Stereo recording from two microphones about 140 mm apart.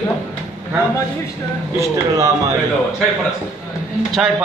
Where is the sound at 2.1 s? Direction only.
20° right (ahead or behind).